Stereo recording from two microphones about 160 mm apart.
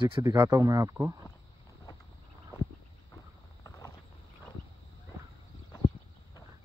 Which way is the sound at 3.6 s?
20° left (ahead or behind).